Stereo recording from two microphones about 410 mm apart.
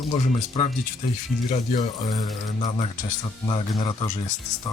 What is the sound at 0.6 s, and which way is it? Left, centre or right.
Speech, centre.